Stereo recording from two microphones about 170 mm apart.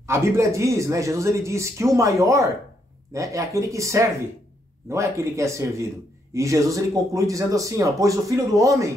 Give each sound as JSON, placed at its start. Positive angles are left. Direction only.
{"t": 0.0, "sound": "speech", "side_deg": -15}